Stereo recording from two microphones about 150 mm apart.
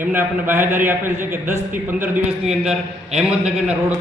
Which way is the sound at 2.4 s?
5° right (ahead or behind).